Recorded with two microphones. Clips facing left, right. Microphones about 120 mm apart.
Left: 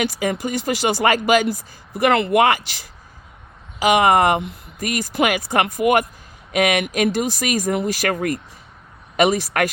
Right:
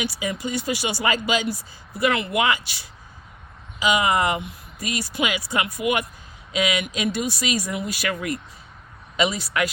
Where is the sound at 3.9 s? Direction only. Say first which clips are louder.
Left 6 dB; 60° left (ahead or behind).